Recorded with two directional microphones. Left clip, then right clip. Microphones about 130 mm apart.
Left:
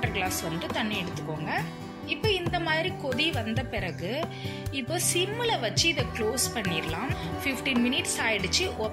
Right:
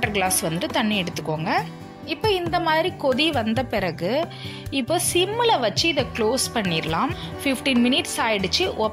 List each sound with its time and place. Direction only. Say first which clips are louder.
0.0 s a woman's voice: right 7 dB; 90° right
2.0 s a woman's voice: right 5 dB; 50° right (ahead or behind)
4.7 s a woman's voice: right 7 dB; 50° right (ahead or behind)